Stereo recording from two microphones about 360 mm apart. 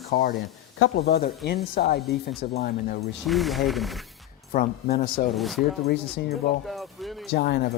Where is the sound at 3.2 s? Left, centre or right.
Centre.